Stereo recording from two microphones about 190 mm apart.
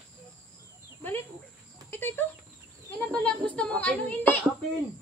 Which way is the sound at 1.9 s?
10° left (ahead or behind).